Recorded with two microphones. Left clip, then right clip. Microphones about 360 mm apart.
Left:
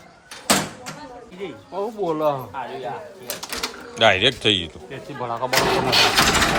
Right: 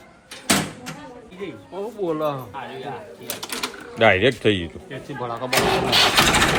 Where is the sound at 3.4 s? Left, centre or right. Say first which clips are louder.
Even; centre.